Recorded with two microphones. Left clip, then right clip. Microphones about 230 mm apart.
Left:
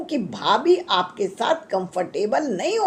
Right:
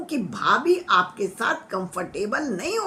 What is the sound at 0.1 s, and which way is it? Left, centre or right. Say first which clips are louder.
A woman's voice: left 1 dB; right.